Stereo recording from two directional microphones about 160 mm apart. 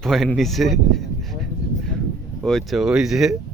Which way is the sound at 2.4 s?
Centre (ahead or behind).